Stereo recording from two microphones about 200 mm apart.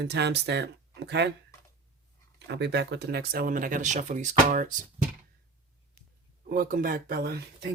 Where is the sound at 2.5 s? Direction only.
55° right (ahead or behind); by 4.7 s 40° right (ahead or behind).